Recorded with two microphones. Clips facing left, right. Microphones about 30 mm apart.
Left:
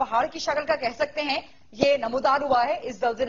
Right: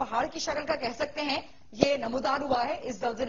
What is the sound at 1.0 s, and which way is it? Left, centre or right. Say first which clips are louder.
A woman's voice: left 5 dB; centre.